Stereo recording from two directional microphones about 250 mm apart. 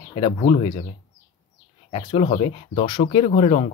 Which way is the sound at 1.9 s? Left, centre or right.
Left.